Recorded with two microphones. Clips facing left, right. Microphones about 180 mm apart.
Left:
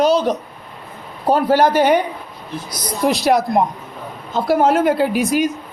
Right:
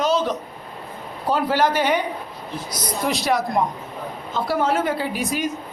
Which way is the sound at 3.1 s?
35° left (ahead or behind).